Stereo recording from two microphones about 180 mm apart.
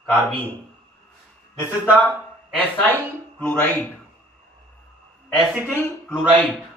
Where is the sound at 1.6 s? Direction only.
10° right (ahead or behind).